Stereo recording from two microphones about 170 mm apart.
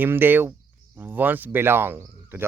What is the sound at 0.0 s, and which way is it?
Speech, 10° right (ahead or behind).